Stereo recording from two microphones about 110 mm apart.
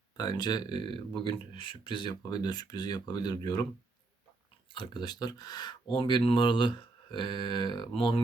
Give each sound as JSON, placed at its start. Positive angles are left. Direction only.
{"t": 0.2, "sound": "speech", "side_deg": 40}
{"t": 4.7, "sound": "speech", "side_deg": 45}